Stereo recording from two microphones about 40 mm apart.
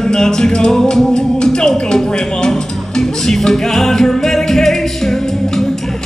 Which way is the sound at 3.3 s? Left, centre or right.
Centre.